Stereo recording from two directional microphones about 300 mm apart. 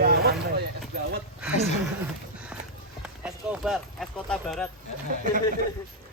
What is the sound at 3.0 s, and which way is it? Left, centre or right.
Speech, centre.